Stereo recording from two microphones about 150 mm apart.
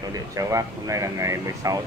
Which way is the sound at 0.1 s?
20° right (ahead or behind).